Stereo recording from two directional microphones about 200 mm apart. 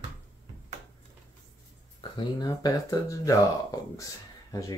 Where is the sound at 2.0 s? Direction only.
25° left (ahead or behind).